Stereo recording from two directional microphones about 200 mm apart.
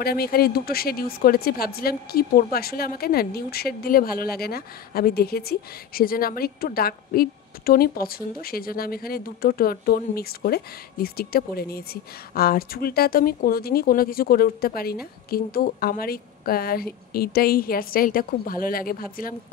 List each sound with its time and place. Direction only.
0.0 s a woman's voice: 50° left (ahead or behind)